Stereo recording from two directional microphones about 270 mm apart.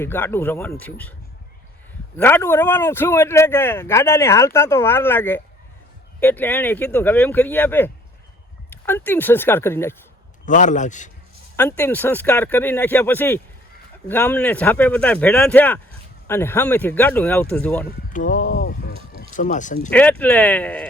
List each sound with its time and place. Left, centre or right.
0.0 s speech: centre
2.1 s speech: centre
10.4 s a man's voice: left
11.5 s speech: centre
18.1 s speech: left
19.9 s speech: centre